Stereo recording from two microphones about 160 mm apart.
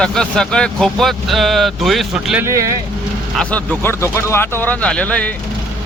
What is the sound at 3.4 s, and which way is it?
Speech, 10° left (ahead or behind).